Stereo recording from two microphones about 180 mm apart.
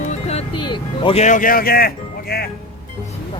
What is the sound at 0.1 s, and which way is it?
Music, 35° left (ahead or behind).